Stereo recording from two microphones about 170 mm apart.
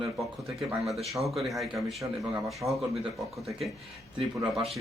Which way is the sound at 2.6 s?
20° right (ahead or behind).